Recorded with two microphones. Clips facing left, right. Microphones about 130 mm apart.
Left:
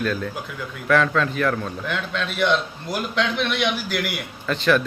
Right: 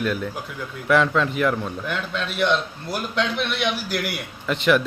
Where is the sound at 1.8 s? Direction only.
5° right (ahead or behind).